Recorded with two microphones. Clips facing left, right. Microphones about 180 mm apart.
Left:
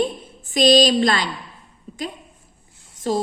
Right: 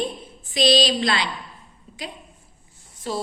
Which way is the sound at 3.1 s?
45° left (ahead or behind).